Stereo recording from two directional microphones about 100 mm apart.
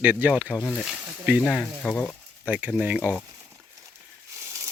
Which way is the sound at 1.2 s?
15° right (ahead or behind).